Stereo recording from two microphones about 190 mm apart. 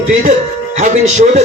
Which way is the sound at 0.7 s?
40° right (ahead or behind).